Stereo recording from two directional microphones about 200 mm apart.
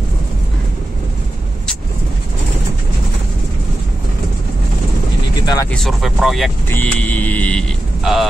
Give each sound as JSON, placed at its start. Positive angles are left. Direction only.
{"t": 5.4, "sound": "a sound", "side_deg": 20}
{"t": 5.7, "sound": "speech", "side_deg": 0}
{"t": 6.7, "sound": "mantra", "side_deg": 10}